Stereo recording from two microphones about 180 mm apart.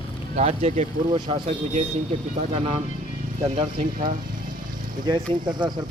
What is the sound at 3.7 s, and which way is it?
Speech, 50° right (ahead or behind).